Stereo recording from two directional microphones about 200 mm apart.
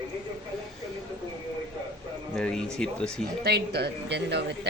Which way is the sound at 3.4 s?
55° right (ahead or behind).